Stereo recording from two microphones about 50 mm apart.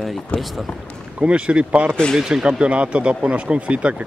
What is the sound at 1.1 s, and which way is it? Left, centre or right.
Speech, right.